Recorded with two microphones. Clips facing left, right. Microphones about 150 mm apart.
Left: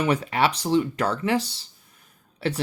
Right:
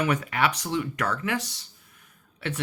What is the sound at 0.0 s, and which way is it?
Speech, 30° left (ahead or behind).